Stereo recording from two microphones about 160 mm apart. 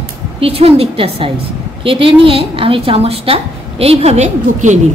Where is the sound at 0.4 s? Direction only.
35° right (ahead or behind).